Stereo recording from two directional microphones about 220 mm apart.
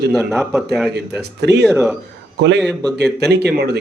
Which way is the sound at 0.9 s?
50° right (ahead or behind).